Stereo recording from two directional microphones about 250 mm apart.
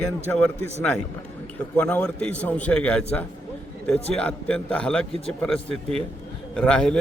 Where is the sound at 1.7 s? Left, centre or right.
Centre.